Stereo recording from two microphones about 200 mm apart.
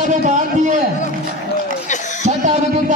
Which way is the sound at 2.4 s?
35° right (ahead or behind).